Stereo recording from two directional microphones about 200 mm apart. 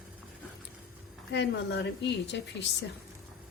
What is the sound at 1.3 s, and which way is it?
A woman's voice, 60° left (ahead or behind).